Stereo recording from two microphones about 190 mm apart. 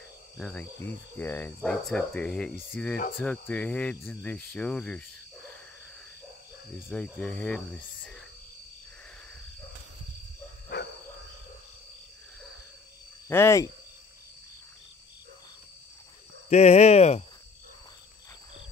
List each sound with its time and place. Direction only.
0.4 s speech: 5° left (ahead or behind)
6.9 s speech: 5° left (ahead or behind)
10.7 s a sound: 55° left (ahead or behind)
13.3 s speech: 15° left (ahead or behind)
16.4 s speech: 35° left (ahead or behind)